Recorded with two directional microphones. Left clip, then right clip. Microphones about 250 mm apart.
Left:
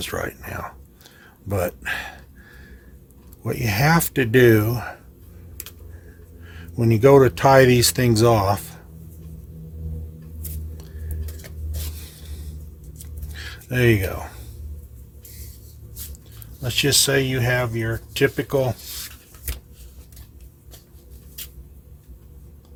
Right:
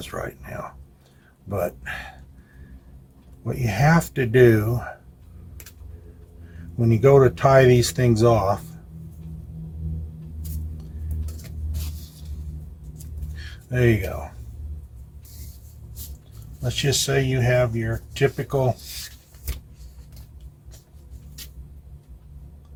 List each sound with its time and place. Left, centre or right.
0.0 s speech: left
3.4 s speech: left
6.7 s speech: left
13.3 s a sound: left
16.6 s speech: left